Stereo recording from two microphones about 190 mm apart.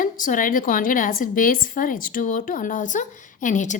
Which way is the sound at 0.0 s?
45° left (ahead or behind).